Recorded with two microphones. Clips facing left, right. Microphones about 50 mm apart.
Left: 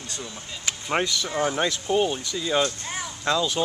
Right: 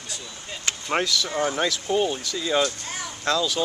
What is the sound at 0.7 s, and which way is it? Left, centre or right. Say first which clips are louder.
Speech: right 1 dB; centre.